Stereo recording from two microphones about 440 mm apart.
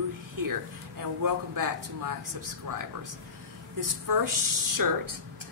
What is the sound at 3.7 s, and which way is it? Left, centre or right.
Speech, right.